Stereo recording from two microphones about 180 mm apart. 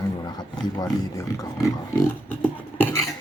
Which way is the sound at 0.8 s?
20° left (ahead or behind).